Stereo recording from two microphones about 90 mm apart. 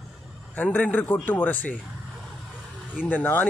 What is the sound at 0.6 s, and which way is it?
Speech, 20° left (ahead or behind).